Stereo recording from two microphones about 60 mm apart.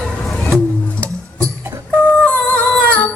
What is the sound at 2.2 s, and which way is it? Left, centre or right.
Music, left.